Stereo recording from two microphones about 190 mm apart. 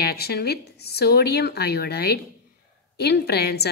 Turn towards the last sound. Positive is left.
turn(degrees=60)  # may be behind; listen again after turning